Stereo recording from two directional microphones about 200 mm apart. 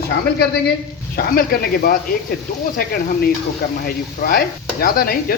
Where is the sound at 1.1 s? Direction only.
50° left (ahead or behind).